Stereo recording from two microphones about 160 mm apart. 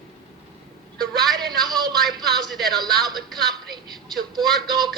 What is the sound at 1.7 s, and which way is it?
Speech, centre (ahead or behind).